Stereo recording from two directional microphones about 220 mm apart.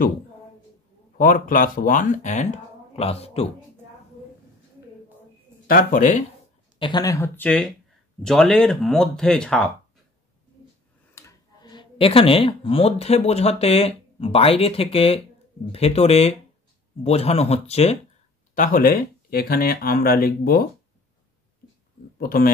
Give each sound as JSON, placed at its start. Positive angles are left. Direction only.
{"t": 1.1, "sound": "speech", "side_deg": 40}
{"t": 5.7, "sound": "speech", "side_deg": 40}
{"t": 6.8, "sound": "speech", "side_deg": 20}
{"t": 11.1, "sound": "speech", "side_deg": 15}
{"t": 22.2, "sound": "speech", "side_deg": 40}